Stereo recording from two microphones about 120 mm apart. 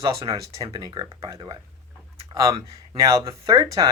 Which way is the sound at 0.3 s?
30° right (ahead or behind).